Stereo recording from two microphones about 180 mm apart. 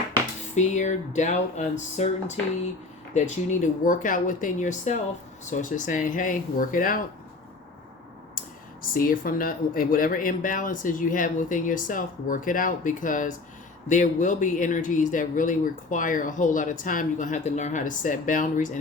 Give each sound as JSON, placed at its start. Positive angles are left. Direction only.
{"t": 0.5, "sound": "speech", "side_deg": 40}
{"t": 8.8, "sound": "speech", "side_deg": 50}